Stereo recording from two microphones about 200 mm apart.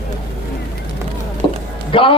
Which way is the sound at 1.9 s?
25° left (ahead or behind).